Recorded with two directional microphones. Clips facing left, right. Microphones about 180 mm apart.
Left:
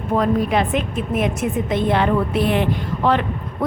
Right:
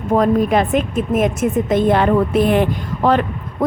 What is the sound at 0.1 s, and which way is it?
Speech, 45° right (ahead or behind).